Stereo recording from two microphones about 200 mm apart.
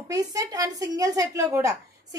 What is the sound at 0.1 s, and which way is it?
A woman's voice, 15° right (ahead or behind).